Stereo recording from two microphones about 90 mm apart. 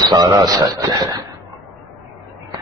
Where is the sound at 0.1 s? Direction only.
45° right (ahead or behind).